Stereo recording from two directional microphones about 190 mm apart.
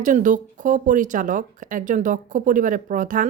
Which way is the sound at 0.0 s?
40° right (ahead or behind).